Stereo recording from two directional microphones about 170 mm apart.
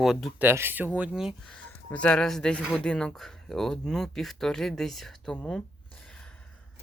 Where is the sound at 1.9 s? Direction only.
5° left (ahead or behind).